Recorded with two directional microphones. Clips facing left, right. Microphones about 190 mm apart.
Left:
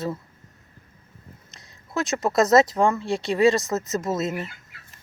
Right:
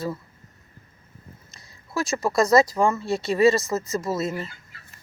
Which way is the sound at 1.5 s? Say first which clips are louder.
Left 1 dB; 20° left (ahead or behind).